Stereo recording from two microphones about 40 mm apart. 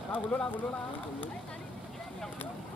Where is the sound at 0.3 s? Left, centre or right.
Centre.